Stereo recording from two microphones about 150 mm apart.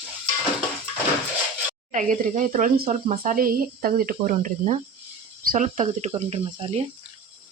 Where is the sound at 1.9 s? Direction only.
55° right (ahead or behind).